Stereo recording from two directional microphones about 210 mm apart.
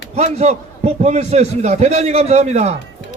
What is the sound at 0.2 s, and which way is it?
A man's voice, 30° right (ahead or behind).